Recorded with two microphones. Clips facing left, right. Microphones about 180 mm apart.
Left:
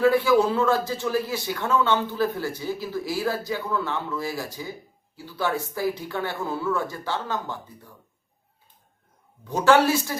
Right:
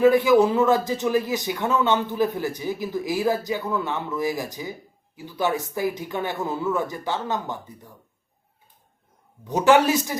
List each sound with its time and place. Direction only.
0.0 s speech: 20° right (ahead or behind)
9.4 s speech: 20° right (ahead or behind)